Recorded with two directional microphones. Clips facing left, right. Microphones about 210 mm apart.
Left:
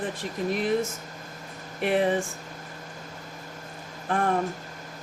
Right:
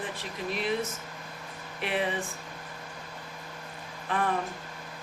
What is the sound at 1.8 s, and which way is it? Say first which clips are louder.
Speech: left 7 dB; 45° left (ahead or behind).